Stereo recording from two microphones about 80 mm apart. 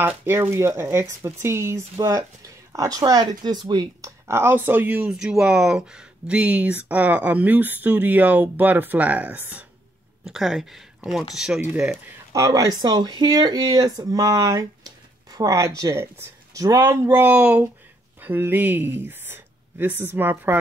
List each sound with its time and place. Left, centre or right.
0.0 s speech: right
2.0 s speech: right
4.0 s speech: right
10.2 s speech: centre
12.3 s speech: right
17.4 s speech: centre